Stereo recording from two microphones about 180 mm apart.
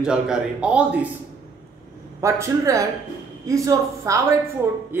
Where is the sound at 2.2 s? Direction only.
15° right (ahead or behind).